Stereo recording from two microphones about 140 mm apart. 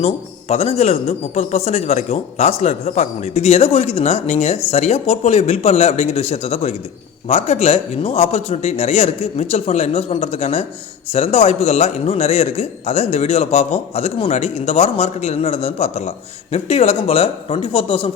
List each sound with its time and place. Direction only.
0.0 s a man's voice: 50° left (ahead or behind)